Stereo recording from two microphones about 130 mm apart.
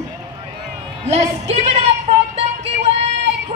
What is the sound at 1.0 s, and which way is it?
Speech, 55° right (ahead or behind).